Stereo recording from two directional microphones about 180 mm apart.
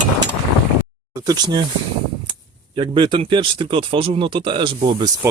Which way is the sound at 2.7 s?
25° right (ahead or behind).